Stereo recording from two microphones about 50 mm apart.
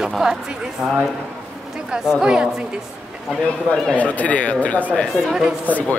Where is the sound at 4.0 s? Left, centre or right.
Left.